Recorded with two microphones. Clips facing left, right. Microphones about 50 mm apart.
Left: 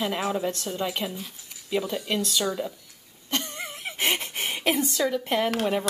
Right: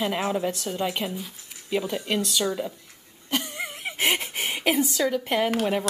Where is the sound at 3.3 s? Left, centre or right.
Centre.